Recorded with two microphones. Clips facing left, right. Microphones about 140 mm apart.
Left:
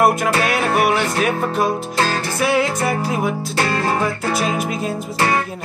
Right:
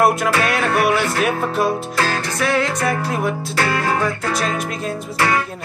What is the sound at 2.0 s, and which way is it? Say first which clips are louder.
Music: left 1 dB; 30° left (ahead or behind).